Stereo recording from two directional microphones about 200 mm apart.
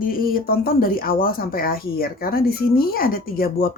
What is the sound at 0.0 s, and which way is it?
Speech, 45° left (ahead or behind).